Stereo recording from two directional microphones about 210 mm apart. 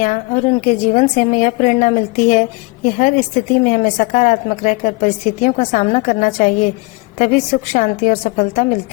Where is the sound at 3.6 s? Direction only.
35° left (ahead or behind).